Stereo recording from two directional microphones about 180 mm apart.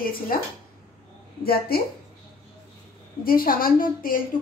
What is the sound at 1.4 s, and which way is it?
Speech, 60° left (ahead or behind).